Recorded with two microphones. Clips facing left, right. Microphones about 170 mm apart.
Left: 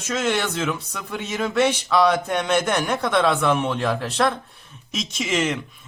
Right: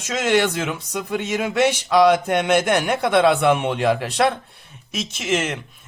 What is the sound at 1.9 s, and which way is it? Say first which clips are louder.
A man's voice: right 5 dB; 60° right (ahead or behind).